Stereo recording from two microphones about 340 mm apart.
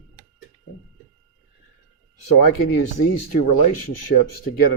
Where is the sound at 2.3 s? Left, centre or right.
Left.